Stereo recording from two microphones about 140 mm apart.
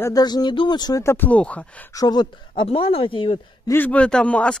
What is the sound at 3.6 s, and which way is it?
Speech, 15° left (ahead or behind).